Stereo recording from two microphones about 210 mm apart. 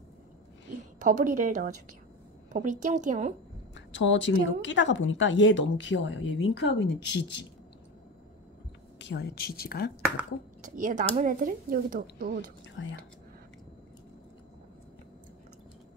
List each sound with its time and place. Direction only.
0.9 s speech: 40° right (ahead or behind)
3.7 s a woman's voice: 60° left (ahead or behind)
8.9 s a woman's voice: 55° left (ahead or behind)
10.6 s speech: 35° right (ahead or behind)
12.8 s a woman's voice: 60° left (ahead or behind)